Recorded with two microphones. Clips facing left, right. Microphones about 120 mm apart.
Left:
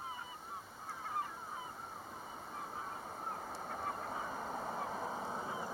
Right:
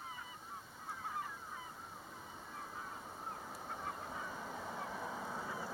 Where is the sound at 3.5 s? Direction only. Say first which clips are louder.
Left 3 dB; 50° left (ahead or behind); by 5.6 s 30° left (ahead or behind).